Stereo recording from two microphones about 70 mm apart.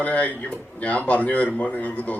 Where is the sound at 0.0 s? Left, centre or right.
Left.